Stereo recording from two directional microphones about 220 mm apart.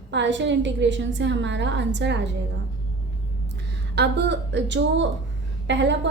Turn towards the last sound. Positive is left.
turn(degrees=-55)  # may be behind; listen again after turning